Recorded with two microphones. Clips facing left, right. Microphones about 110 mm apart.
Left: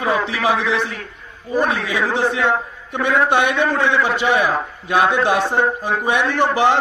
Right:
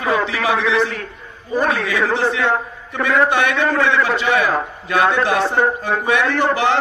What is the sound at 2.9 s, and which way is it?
Speech, 25° left (ahead or behind).